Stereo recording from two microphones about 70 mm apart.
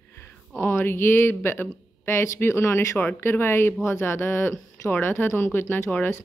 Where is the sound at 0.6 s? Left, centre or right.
Left.